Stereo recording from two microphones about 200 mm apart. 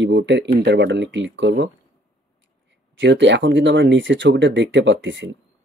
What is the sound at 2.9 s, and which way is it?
Speech, 60° right (ahead or behind).